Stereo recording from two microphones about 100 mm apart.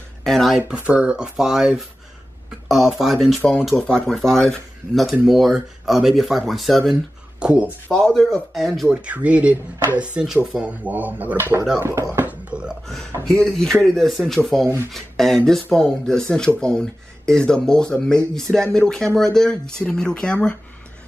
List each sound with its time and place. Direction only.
0.2 s speech: 5° left (ahead or behind)
0.6 s speech: 15° right (ahead or behind); by 6.8 s centre (ahead or behind)
7.3 s speech: 10° right (ahead or behind)
7.9 s speech: 5° left (ahead or behind)
8.9 s speech: 15° right (ahead or behind); by 12.3 s 30° right (ahead or behind)
12.3 s a sound: 10° right (ahead or behind)
12.8 s speech: 5° left (ahead or behind)